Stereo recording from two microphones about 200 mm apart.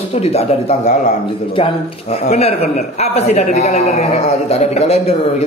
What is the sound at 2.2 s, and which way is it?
A man's voice, 30° left (ahead or behind).